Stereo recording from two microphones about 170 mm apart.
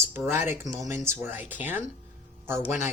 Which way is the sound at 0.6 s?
45° left (ahead or behind).